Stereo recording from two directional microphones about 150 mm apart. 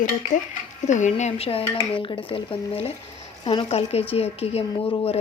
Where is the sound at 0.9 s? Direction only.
55° left (ahead or behind).